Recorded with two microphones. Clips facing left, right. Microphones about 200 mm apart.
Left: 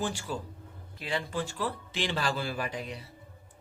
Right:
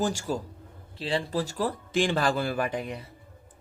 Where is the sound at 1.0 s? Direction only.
30° right (ahead or behind); by 3.0 s 55° right (ahead or behind).